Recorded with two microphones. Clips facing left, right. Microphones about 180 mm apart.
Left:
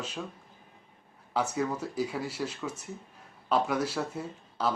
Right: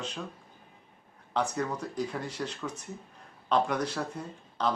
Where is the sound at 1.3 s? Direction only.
5° left (ahead or behind).